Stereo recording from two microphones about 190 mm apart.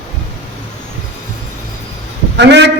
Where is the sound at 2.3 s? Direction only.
65° right (ahead or behind).